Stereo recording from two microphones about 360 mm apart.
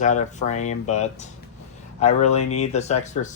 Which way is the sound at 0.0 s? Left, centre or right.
Centre.